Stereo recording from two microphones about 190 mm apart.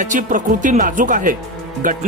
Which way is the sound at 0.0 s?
45° right (ahead or behind).